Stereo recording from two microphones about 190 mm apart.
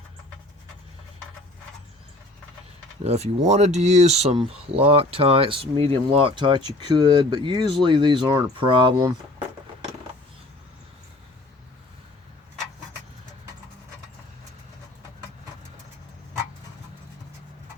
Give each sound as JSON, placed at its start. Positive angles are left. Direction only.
{"t": 3.0, "sound": "speech", "side_deg": -35}